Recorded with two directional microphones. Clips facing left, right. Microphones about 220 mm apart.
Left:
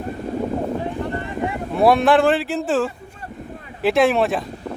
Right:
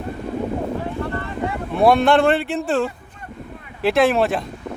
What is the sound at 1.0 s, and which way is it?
Boat, 20° left (ahead or behind).